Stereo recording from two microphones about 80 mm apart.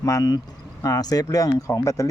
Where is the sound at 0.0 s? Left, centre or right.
Left.